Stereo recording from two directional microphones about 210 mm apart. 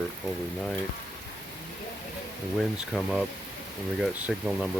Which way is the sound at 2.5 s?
Centre (ahead or behind).